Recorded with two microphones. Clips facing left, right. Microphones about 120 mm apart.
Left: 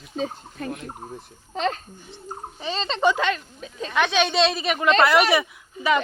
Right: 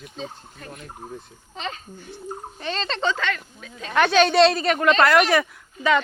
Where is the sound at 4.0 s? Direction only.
Centre (ahead or behind).